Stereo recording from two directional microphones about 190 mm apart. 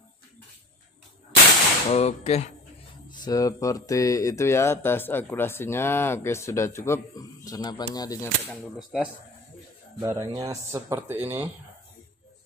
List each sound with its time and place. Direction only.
1.9 s speech: 35° left (ahead or behind)
3.1 s a sound: 20° left (ahead or behind)
8.5 s speech: centre (ahead or behind)
10.0 s speech: 15° right (ahead or behind)